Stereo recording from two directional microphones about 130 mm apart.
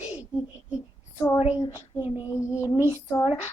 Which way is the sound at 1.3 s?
55° left (ahead or behind).